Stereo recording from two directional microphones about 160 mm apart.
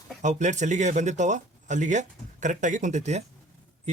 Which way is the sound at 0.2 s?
50° right (ahead or behind).